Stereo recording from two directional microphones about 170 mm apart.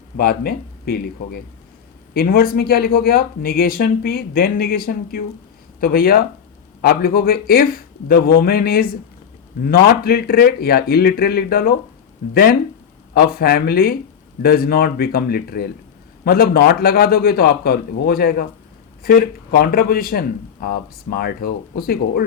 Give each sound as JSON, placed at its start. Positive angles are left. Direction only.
{"t": 0.2, "sound": "speech", "side_deg": 65}
{"t": 5.8, "sound": "speech", "side_deg": 60}